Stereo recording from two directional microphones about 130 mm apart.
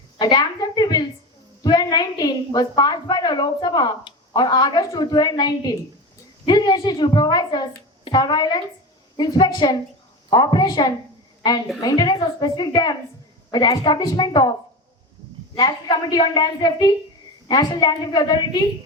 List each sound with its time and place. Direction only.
0.2 s a woman's voice: 35° left (ahead or behind)
15.5 s a woman's voice: 35° left (ahead or behind)